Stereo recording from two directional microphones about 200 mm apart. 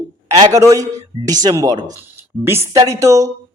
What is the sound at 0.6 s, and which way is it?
A man's voice, 15° right (ahead or behind).